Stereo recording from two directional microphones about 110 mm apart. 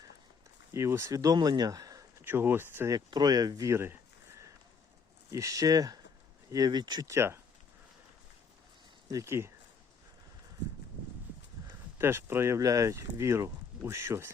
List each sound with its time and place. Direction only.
0.7 s speech: 25° right (ahead or behind)
2.2 s speech: 20° right (ahead or behind)
2.9 s speech: 40° right (ahead or behind)
5.3 s speech: 30° right (ahead or behind)
7.1 s speech: 25° right (ahead or behind)
9.0 s speech: 30° right (ahead or behind)
11.9 s speech: 20° right (ahead or behind)